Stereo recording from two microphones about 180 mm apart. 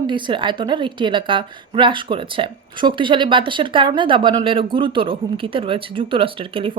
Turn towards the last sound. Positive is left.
turn(degrees=-30)  # may be behind; listen again after turning